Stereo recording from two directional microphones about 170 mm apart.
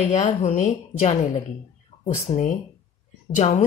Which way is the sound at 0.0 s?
40° left (ahead or behind).